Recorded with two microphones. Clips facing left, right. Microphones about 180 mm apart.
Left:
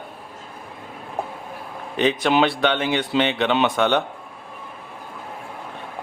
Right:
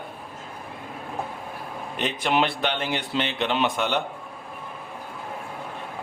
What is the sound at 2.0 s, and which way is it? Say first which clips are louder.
Speech: left 6 dB; 90° left.